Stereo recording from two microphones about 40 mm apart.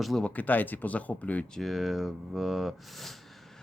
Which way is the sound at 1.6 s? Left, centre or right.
Centre.